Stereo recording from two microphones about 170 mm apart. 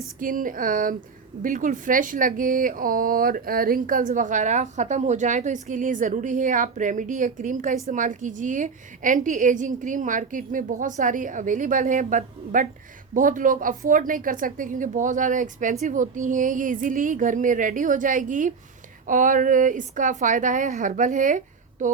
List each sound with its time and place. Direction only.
0.2 s speech: 55° right (ahead or behind)